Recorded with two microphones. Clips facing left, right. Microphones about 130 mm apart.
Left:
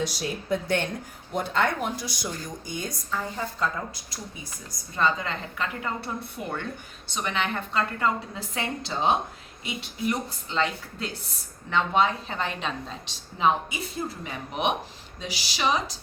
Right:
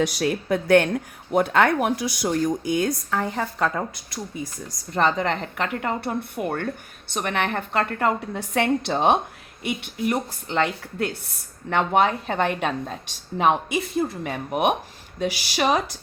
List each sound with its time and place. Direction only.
0.0 s speech: 65° right (ahead or behind)
4.9 s speech: 75° right (ahead or behind)
14.3 s speech: 50° right (ahead or behind)